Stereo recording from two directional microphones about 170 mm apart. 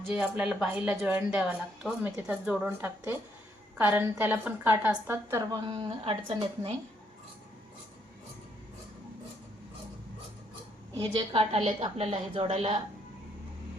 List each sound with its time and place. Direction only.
0.0 s a woman's voice: 5° right (ahead or behind)
5.6 s a woman's voice: 30° right (ahead or behind)
11.0 s a woman's voice: 30° right (ahead or behind)